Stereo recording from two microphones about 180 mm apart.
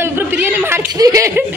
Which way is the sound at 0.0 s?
10° right (ahead or behind).